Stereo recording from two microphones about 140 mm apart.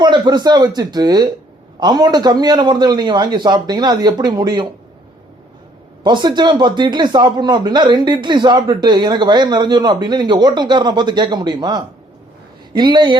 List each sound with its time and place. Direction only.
0.0 s a man's voice: 30° right (ahead or behind)
6.0 s a man's voice: 35° right (ahead or behind)